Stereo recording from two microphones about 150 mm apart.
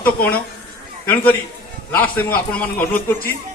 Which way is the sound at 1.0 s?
10° left (ahead or behind).